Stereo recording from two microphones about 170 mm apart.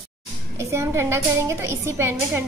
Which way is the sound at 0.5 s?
15° right (ahead or behind).